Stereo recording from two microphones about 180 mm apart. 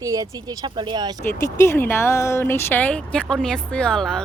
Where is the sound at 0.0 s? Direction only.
20° right (ahead or behind).